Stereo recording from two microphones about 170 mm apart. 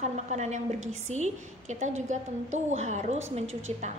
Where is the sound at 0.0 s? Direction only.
45° right (ahead or behind).